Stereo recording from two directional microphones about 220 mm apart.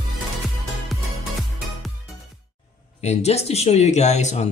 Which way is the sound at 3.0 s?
30° left (ahead or behind).